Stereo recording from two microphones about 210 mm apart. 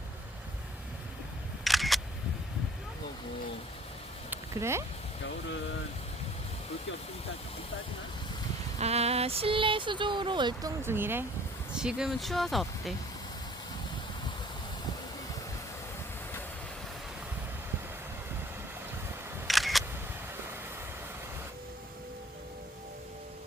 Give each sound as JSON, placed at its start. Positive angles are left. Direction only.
{"t": 1.6, "sound": "single-lens reflex camera", "side_deg": 0}
{"t": 4.3, "sound": "a sound", "side_deg": -15}
{"t": 8.8, "sound": "speech", "side_deg": -30}
{"t": 19.5, "sound": "single-lens reflex camera", "side_deg": 0}